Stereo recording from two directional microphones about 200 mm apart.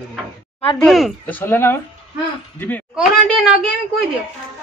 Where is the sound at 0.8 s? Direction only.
Centre (ahead or behind).